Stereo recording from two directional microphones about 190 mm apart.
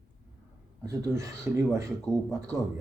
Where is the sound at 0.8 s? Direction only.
15° right (ahead or behind).